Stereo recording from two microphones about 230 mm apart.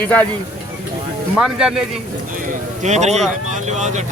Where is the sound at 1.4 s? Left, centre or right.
Centre.